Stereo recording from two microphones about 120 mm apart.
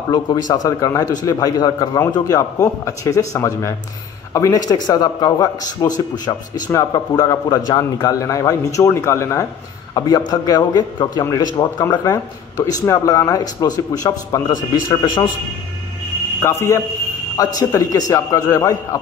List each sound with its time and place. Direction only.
0.1 s a man's voice: 35° left (ahead or behind)
16.4 s a man's voice: 20° left (ahead or behind)